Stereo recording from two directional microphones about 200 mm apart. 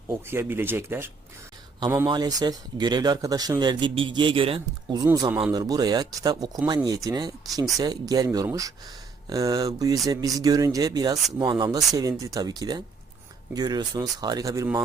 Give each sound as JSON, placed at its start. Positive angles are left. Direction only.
{"t": 0.3, "sound": "speech", "side_deg": -10}